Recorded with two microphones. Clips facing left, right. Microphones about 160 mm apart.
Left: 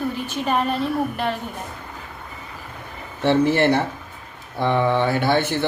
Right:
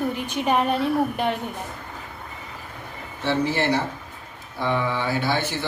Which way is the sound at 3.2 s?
55° left (ahead or behind).